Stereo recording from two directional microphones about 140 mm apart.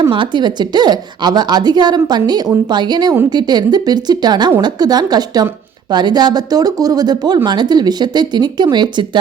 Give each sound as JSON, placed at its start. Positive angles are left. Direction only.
{"t": 0.1, "sound": "a woman's voice", "side_deg": -35}